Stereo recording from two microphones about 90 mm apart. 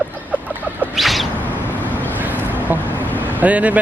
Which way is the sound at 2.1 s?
20° right (ahead or behind).